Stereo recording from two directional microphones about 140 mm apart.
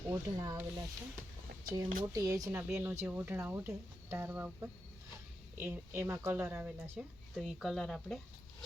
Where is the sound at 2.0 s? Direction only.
25° right (ahead or behind).